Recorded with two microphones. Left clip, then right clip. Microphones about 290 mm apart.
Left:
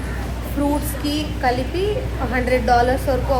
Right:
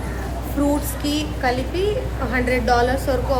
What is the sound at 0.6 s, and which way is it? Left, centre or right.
A woman's voice, centre.